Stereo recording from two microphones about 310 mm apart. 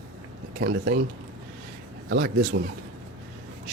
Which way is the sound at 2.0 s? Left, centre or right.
Right.